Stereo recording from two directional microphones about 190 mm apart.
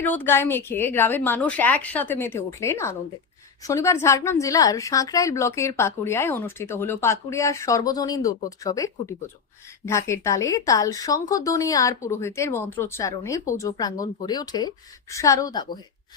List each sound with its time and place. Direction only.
0.0 s a woman's voice: 10° left (ahead or behind)